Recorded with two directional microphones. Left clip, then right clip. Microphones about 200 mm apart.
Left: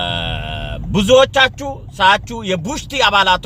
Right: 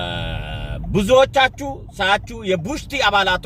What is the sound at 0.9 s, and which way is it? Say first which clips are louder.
Speech: left 3 dB; 10° left (ahead or behind).